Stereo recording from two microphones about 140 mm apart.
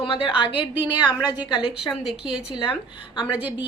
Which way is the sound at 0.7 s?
15° right (ahead or behind).